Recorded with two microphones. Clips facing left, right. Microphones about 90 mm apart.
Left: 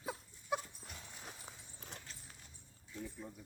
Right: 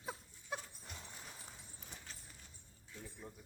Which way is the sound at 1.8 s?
75° left (ahead or behind).